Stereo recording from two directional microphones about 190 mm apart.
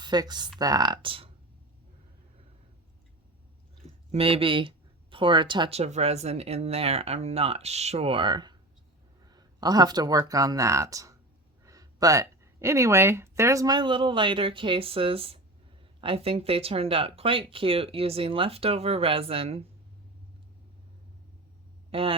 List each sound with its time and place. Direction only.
0.0 s speech: 20° right (ahead or behind)
4.1 s speech: 30° right (ahead or behind)
21.8 s speech: 30° right (ahead or behind)